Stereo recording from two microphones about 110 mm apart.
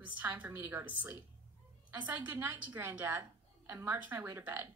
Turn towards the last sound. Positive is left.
turn(degrees=-20)  # may be behind; listen again after turning